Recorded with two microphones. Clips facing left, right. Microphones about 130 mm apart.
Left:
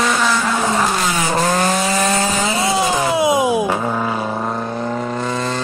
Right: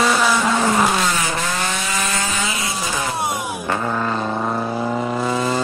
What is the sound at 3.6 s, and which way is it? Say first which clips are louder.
Vehicle: left 2 dB; 10° left (ahead or behind).